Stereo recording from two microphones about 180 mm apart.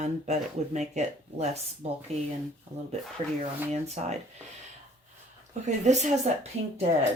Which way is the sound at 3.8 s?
40° right (ahead or behind).